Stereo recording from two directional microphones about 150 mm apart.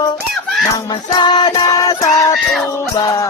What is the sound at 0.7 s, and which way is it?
Music, 30° left (ahead or behind).